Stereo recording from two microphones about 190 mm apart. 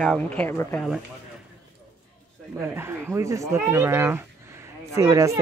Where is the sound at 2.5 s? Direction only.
10° right (ahead or behind).